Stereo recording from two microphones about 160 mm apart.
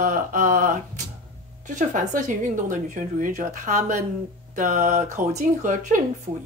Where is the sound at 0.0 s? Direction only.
55° right (ahead or behind).